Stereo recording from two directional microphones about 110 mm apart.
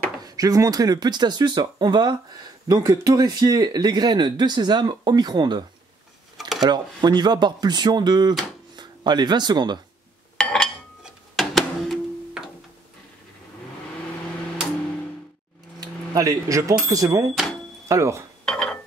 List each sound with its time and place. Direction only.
0.2 s speech: 30° right (ahead or behind)
10.3 s a sound: 5° left (ahead or behind)
11.1 s music: centre (ahead or behind)
15.8 s speech: 30° right (ahead or behind)
18.4 s cutlery: 5° left (ahead or behind)